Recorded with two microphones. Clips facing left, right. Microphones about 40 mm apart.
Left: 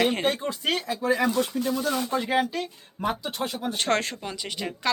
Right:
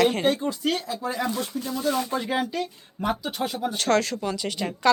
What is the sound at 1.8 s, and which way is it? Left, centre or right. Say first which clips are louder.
Speech: right 1 dB; centre.